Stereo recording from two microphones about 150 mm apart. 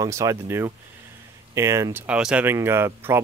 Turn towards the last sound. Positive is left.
turn(degrees=-15)  # may be behind; listen again after turning